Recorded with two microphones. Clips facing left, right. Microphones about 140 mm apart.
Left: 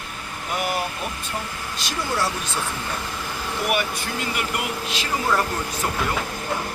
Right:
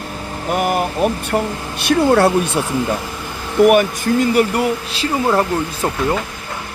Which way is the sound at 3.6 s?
50° right (ahead or behind).